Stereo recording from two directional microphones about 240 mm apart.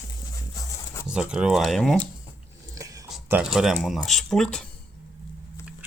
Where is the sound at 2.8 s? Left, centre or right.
Centre.